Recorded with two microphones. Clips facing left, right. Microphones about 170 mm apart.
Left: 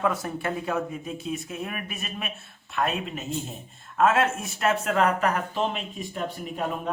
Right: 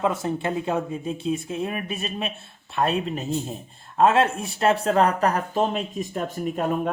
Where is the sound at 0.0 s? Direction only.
25° right (ahead or behind); by 6.2 s 40° right (ahead or behind).